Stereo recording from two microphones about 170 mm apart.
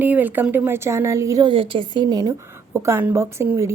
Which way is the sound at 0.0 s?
10° right (ahead or behind).